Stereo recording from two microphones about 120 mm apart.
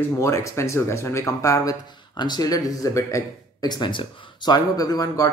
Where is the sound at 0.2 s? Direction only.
25° left (ahead or behind).